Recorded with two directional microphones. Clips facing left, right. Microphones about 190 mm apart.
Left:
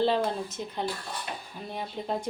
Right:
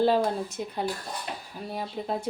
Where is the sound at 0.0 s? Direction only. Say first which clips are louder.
Right 3 dB; 10° right (ahead or behind).